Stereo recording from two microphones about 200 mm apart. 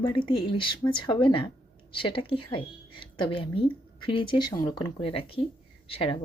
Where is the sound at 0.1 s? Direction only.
25° left (ahead or behind).